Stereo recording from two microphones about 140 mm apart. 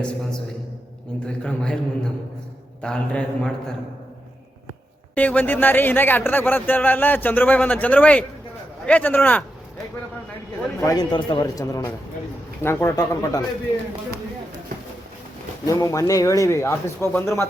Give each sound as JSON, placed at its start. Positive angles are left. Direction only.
{"t": 1.4, "sound": "speech", "side_deg": 5}
{"t": 2.8, "sound": "speech", "side_deg": 5}
{"t": 5.1, "sound": "speech", "side_deg": 10}
{"t": 10.8, "sound": "speech", "side_deg": 25}
{"t": 15.6, "sound": "speech", "side_deg": 25}